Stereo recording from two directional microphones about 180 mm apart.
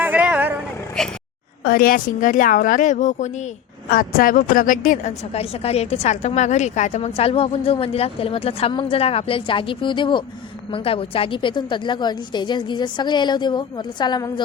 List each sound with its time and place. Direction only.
0.0 s vehicle: 10° right (ahead or behind)
1.0 s speech: 5° left (ahead or behind)
1.6 s a woman's voice: 55° left (ahead or behind)
3.8 s a woman's voice: 55° left (ahead or behind); by 14.4 s 20° left (ahead or behind)